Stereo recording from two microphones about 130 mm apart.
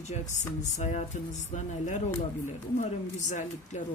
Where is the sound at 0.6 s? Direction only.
65° left (ahead or behind).